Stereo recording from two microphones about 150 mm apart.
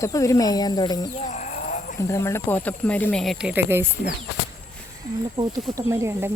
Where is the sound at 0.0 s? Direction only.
20° left (ahead or behind).